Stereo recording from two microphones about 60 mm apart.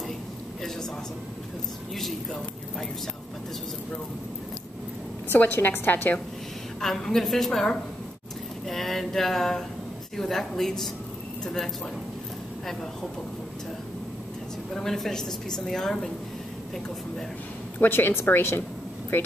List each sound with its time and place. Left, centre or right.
5.3 s a woman's voice: left
6.8 s a woman's voice: centre
8.6 s a sound: centre
10.1 s a woman's voice: centre
14.7 s a woman's voice: centre
17.7 s a woman's voice: left